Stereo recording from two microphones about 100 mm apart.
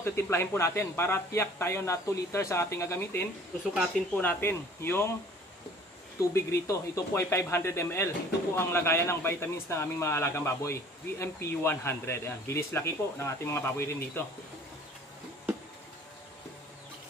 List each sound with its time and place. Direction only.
0.0 s a man's voice: 25° left (ahead or behind)
6.3 s a man's voice: 30° left (ahead or behind)